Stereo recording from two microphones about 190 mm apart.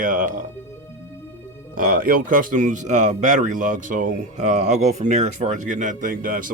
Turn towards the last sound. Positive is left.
turn(degrees=-45)  # may be behind; listen again after turning